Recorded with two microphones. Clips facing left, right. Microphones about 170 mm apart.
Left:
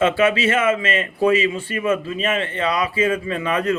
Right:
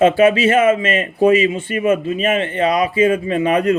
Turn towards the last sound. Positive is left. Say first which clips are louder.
# right 6 dB
turn(degrees=-30)  # may be behind; listen again after turning